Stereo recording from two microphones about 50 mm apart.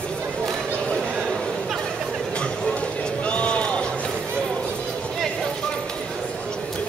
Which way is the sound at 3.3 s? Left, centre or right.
Left.